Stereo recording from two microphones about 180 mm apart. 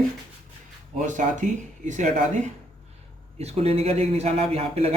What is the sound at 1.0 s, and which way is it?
Speech, 45° right (ahead or behind).